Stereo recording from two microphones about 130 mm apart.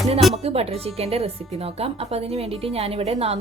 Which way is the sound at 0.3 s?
50° right (ahead or behind).